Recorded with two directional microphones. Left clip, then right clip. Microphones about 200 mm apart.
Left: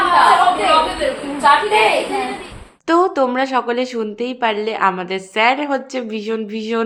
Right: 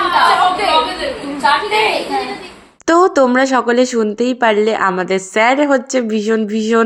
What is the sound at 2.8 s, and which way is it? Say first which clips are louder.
A woman's voice: right 4 dB; 30° right (ahead or behind).